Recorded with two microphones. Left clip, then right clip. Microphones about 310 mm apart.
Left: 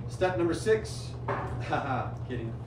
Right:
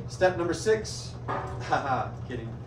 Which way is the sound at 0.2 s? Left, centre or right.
Centre.